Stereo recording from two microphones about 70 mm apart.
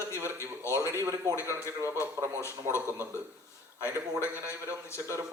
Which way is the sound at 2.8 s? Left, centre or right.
Right.